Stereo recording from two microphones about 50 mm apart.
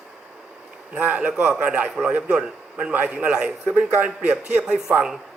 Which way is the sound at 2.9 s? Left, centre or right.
Right.